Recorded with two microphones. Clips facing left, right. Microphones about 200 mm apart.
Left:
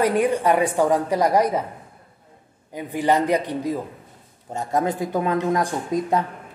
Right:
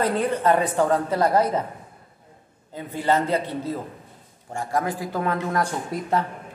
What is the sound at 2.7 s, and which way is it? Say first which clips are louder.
A woman's voice: left 2 dB; 15° left (ahead or behind).